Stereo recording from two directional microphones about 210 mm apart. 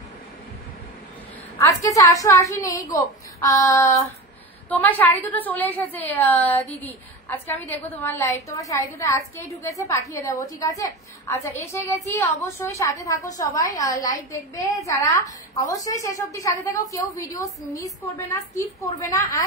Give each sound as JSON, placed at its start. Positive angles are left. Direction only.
{"t": 1.6, "sound": "a woman's voice", "side_deg": 15}